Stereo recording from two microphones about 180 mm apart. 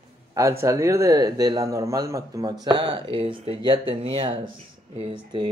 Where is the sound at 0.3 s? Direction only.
15° right (ahead or behind).